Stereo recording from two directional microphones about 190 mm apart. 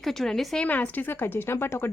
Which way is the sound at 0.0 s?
Centre (ahead or behind).